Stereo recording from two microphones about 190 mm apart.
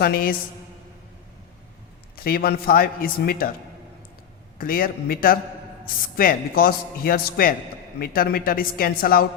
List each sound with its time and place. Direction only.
0.0 s a man's voice: 55° left (ahead or behind)
2.1 s a man's voice: 50° left (ahead or behind)
4.5 s a man's voice: 50° left (ahead or behind)